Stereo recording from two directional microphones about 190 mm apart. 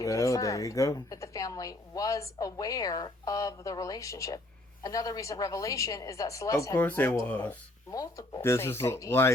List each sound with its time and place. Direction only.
0.0 s a woman's voice: 15° left (ahead or behind)